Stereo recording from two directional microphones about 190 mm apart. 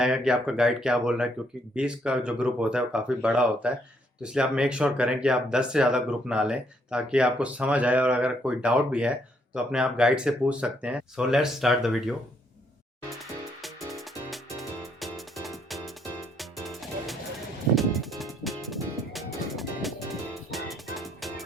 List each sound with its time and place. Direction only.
0.0 s speech: 5° right (ahead or behind)
13.6 s music: centre (ahead or behind)
15.4 s music: centre (ahead or behind)